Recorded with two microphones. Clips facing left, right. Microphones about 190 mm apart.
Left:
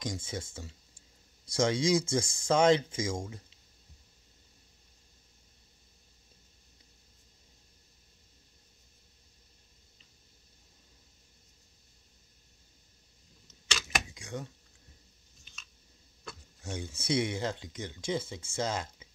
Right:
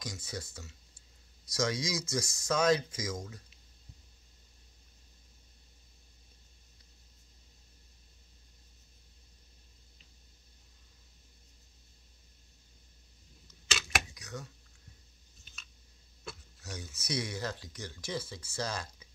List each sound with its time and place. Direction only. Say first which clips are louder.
0.0 s speech: left 5 dB; 25° left (ahead or behind)
13.7 s camera: even; centre (ahead or behind)
14.1 s computer keyboard: left 4 dB; 30° left (ahead or behind)
16.6 s speech: left 7 dB; 25° left (ahead or behind)